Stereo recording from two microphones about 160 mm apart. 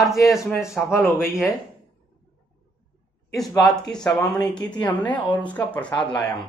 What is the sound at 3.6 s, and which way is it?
A woman's voice, 5° left (ahead or behind).